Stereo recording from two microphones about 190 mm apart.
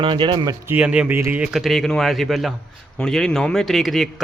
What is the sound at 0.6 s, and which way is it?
A man's voice, 5° right (ahead or behind).